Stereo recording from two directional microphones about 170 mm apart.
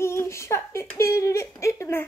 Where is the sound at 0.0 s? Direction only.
15° left (ahead or behind).